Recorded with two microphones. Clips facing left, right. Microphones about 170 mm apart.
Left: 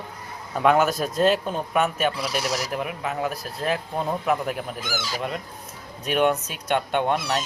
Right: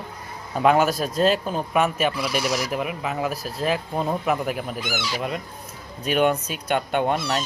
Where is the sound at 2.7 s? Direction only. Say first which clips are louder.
Right 1 dB; 5° right (ahead or behind).